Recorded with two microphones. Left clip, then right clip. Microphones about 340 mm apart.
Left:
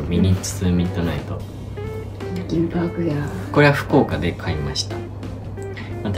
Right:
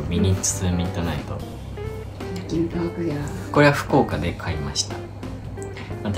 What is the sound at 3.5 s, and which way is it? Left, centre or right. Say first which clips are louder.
Speech: left 1 dB; centre.